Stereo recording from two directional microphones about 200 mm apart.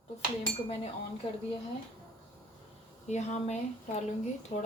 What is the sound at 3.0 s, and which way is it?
Speech, 35° left (ahead or behind).